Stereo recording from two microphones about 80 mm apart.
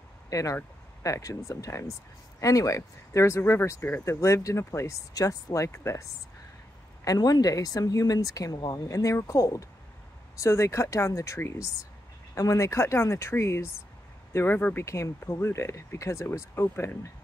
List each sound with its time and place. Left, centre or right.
0.3 s speech: left
5.1 s speech: left
7.1 s speech: left
8.5 s speech: left
8.8 s speech: left
14.9 s speech: left